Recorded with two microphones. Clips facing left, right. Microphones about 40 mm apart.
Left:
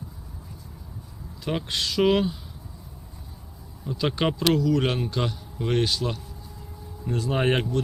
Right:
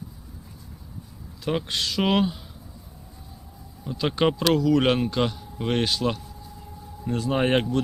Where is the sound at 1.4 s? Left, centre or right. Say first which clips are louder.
Right 1 dB; centre.